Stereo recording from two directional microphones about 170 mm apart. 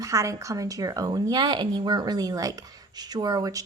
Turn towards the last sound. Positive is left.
turn(degrees=-20)  # may be behind; listen again after turning